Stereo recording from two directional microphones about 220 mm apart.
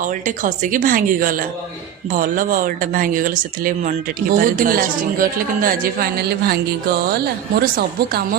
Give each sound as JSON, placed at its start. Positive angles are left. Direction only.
{"t": 0.0, "sound": "speech", "side_deg": -35}